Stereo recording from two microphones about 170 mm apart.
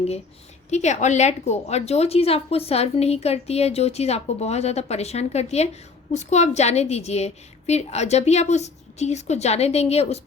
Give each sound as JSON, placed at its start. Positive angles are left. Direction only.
{"t": 0.7, "sound": "a woman's voice", "side_deg": 45}